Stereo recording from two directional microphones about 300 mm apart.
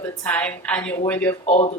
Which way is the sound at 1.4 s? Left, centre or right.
Left.